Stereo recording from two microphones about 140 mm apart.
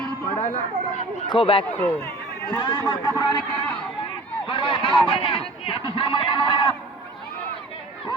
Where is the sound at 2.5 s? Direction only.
30° left (ahead or behind).